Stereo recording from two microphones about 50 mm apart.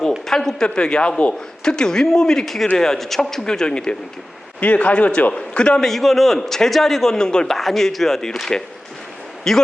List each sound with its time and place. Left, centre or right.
0.3 s a man's voice: centre
5.8 s a man's voice: centre
7.2 s speech: centre
7.5 s a man's voice: centre